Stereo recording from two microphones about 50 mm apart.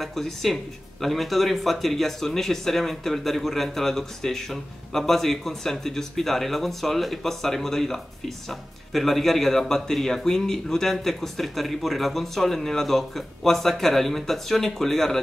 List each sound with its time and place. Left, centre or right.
0.0 s speech: centre